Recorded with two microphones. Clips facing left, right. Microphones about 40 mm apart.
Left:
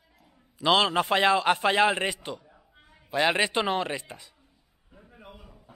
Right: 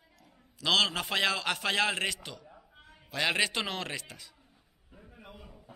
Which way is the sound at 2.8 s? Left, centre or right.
Centre.